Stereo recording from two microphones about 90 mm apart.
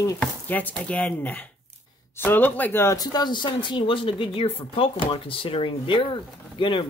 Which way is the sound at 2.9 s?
45° left (ahead or behind).